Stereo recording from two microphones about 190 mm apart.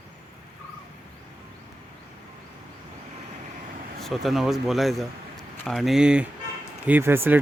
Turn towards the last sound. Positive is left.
turn(degrees=-10)  # may be behind; listen again after turning